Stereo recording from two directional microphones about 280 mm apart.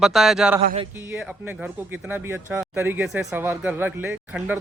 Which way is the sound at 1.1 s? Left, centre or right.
Centre.